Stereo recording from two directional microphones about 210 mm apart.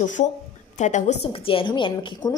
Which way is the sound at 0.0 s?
35° left (ahead or behind).